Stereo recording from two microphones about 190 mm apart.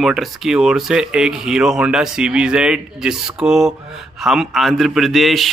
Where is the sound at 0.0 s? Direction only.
Centre (ahead or behind).